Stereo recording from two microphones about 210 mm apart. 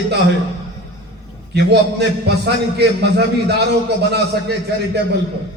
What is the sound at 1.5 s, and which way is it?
A man's voice, 55° right (ahead or behind).